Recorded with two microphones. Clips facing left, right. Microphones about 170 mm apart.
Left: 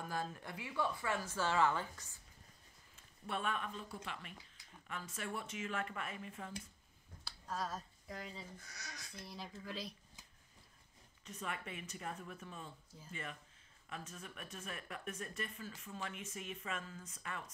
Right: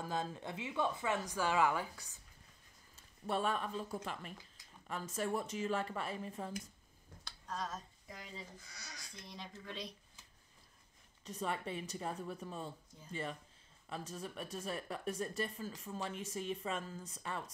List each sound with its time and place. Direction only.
0.0 s a woman's voice: 20° right (ahead or behind)
3.3 s speech: 35° right (ahead or behind)
7.2 s speech: 5° left (ahead or behind)
11.2 s speech: 35° right (ahead or behind)